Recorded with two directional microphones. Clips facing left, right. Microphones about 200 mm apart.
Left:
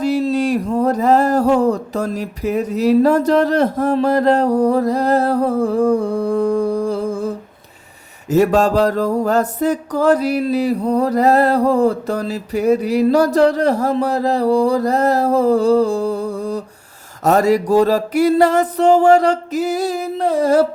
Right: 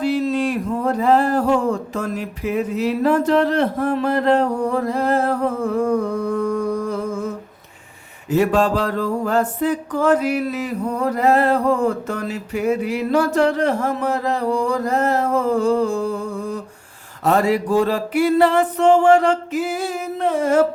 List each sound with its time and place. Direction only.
0.0 s mantra: 40° left (ahead or behind)
8.3 s mantra: 40° left (ahead or behind)